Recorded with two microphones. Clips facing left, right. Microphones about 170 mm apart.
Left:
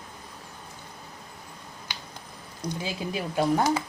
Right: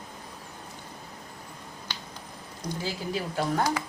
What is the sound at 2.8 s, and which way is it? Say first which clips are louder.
Speech: right 1 dB; 20° left (ahead or behind).